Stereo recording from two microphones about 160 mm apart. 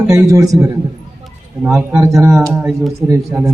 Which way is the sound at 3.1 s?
15° right (ahead or behind).